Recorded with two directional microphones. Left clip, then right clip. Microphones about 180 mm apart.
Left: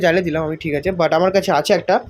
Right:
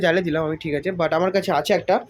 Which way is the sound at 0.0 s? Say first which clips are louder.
Left 3 dB; centre (ahead or behind).